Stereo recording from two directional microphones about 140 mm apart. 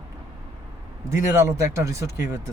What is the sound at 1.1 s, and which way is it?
Speech, 20° right (ahead or behind).